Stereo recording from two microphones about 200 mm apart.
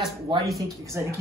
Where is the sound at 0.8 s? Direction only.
15° right (ahead or behind).